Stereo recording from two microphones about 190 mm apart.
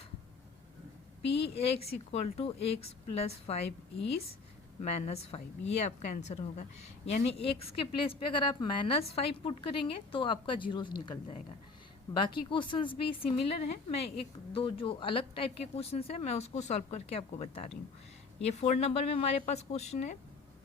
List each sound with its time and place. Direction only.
1.5 s speech: 30° left (ahead or behind)
4.8 s a woman's voice: 35° left (ahead or behind)